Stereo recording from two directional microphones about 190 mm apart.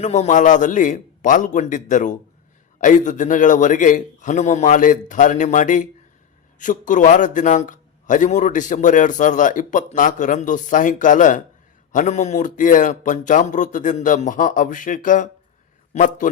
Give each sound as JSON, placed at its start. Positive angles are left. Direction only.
{"t": 0.0, "sound": "a man's voice", "side_deg": 40}